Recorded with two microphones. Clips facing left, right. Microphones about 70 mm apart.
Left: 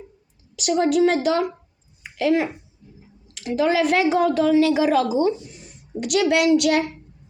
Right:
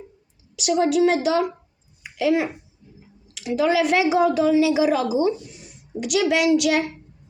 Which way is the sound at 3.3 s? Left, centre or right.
Left.